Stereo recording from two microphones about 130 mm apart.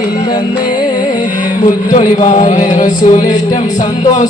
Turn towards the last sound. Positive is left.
turn(degrees=65)  # may be behind; listen again after turning